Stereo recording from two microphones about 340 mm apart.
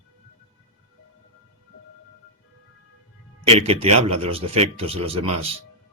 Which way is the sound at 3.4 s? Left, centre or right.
Centre.